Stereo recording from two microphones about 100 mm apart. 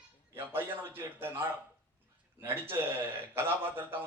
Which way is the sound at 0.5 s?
20° right (ahead or behind).